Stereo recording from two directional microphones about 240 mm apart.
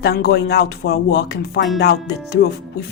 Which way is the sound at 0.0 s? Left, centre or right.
Left.